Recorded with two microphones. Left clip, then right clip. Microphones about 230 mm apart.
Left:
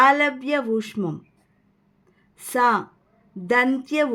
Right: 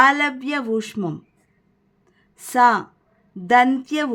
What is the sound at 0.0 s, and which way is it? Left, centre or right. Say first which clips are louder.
Speech: right 1 dB; centre.